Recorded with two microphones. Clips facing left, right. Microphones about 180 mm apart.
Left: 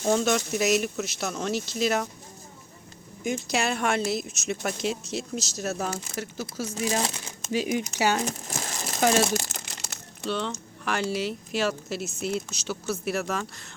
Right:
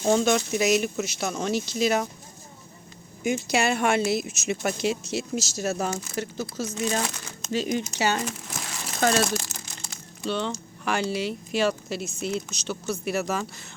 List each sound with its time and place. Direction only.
0.0 s speech: 5° right (ahead or behind)
3.2 s speech: centre (ahead or behind)
8.6 s crumpling: 40° left (ahead or behind)
9.0 s speech: 10° left (ahead or behind)
9.4 s crumpling: 75° left (ahead or behind)
10.2 s speech: centre (ahead or behind)